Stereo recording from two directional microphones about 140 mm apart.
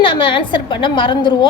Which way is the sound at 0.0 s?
35° left (ahead or behind).